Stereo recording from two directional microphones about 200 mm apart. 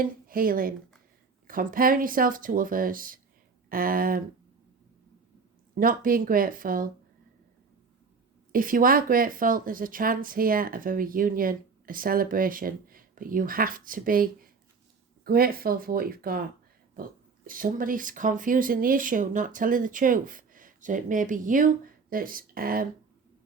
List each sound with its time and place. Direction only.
0.0 s speech: 45° right (ahead or behind)
5.7 s speech: 45° right (ahead or behind)
8.5 s speech: 45° right (ahead or behind)